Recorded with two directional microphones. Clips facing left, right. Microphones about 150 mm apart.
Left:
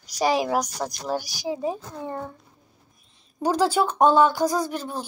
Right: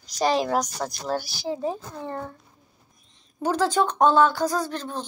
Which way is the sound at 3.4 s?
10° left (ahead or behind).